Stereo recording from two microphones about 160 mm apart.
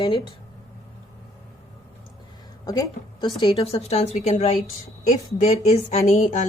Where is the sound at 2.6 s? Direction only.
25° left (ahead or behind).